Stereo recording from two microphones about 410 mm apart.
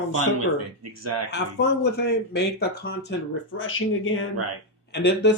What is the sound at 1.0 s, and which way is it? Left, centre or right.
Speech, right.